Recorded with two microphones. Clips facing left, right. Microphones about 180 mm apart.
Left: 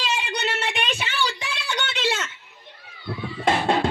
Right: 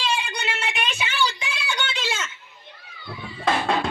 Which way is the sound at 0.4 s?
35° left (ahead or behind).